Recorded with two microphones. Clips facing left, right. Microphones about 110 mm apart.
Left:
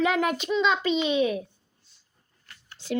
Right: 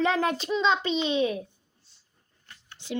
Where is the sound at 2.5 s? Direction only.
20° right (ahead or behind).